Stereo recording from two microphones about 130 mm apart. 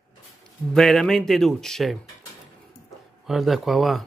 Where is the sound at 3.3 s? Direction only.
Centre (ahead or behind).